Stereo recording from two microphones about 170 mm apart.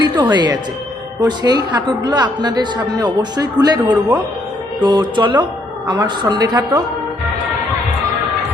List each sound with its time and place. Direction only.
0.0 s speech: 25° right (ahead or behind)